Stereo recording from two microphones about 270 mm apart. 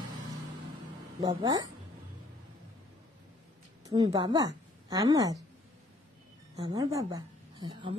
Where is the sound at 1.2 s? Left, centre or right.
Centre.